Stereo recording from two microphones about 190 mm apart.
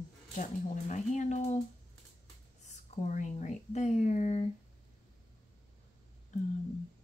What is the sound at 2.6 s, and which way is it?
Speech, 40° left (ahead or behind).